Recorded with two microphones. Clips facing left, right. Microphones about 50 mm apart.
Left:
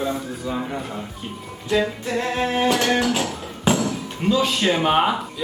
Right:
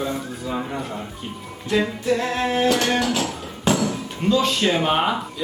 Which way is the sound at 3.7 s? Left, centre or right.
Centre.